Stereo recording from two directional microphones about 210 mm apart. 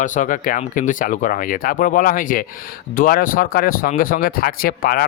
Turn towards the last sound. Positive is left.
turn(degrees=45)  # may be behind; listen again after turning